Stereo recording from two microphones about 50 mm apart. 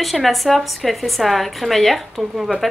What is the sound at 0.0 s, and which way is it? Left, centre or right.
A woman's voice, centre.